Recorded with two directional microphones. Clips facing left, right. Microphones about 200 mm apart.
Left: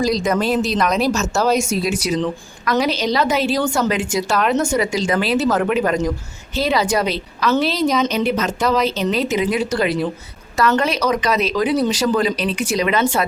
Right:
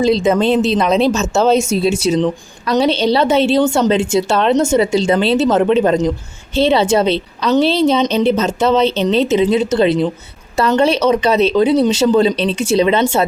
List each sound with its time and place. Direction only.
0.0 s speech: 25° right (ahead or behind)